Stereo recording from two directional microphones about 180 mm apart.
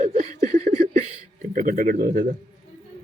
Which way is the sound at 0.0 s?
40° right (ahead or behind).